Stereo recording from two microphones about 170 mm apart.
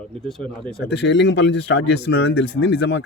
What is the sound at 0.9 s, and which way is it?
Speech, 90° left.